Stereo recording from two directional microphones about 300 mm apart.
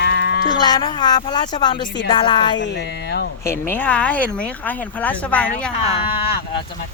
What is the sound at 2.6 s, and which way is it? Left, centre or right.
Speech, left.